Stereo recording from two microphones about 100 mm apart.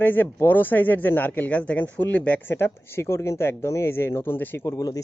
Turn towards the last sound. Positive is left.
turn(degrees=35)  # may be behind; listen again after turning